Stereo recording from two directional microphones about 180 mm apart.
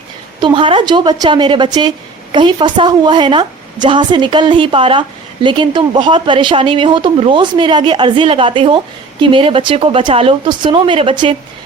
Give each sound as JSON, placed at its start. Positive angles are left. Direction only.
{"t": 0.3, "sound": "a woman's voice", "side_deg": -25}